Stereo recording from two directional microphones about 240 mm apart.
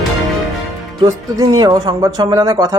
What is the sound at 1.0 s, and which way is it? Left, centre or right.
Speech, centre.